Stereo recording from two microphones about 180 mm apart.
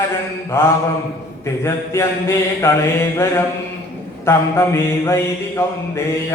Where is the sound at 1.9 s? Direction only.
15° left (ahead or behind).